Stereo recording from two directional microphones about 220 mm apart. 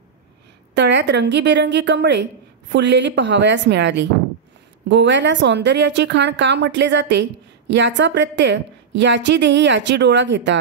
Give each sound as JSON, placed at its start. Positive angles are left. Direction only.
{"t": 0.7, "sound": "a woman's voice", "side_deg": -50}